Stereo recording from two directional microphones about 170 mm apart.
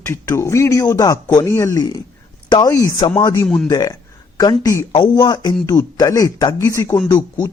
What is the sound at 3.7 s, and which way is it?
Speech, 20° left (ahead or behind).